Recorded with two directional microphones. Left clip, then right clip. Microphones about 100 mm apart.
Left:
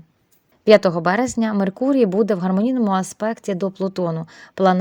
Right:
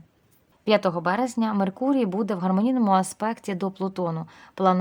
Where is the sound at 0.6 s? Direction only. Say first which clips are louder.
Left 8 dB; 45° left (ahead or behind).